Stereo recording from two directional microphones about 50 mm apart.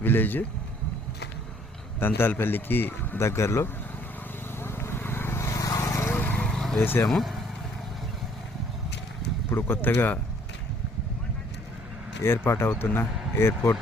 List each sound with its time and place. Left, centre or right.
0.0 s speech: left
2.0 s speech: left
3.2 s speech: left
4.5 s vehicle: left
6.3 s vehicle: centre
6.7 s speech: left
7.1 s speech: centre
9.5 s speech: left
12.5 s a man's voice: left